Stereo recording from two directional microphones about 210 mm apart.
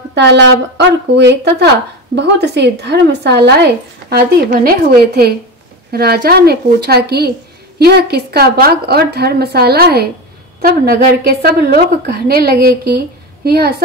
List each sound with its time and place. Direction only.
0.1 s a woman's voice: 55° right (ahead or behind)